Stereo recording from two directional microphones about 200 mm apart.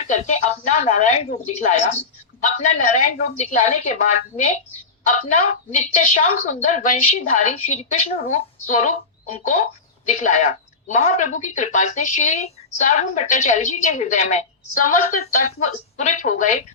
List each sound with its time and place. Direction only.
0.1 s a woman's voice: 35° left (ahead or behind)